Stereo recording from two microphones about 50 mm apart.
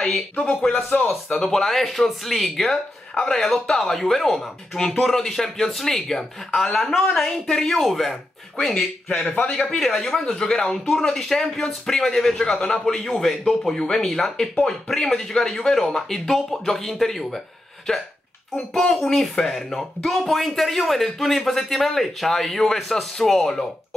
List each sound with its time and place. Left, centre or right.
0.4 s speech: centre
8.7 s speech: centre
19.0 s speech: centre